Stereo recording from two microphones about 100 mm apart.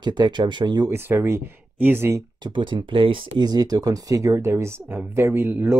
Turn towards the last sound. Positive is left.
turn(degrees=-20)  # may be behind; listen again after turning